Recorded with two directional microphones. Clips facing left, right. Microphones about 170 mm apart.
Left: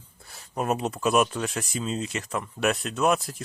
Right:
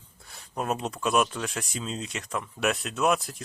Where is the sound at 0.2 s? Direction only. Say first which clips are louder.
Left 3 dB; centre (ahead or behind).